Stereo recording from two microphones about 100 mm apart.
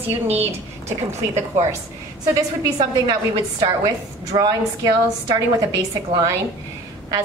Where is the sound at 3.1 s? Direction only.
40° right (ahead or behind).